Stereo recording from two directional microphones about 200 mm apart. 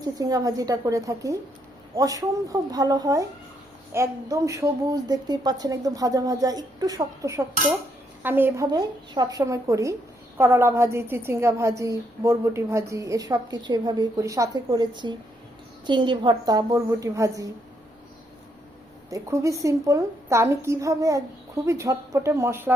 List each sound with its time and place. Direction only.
0.0 s a woman's voice: 20° right (ahead or behind)
19.1 s a woman's voice: 15° right (ahead or behind)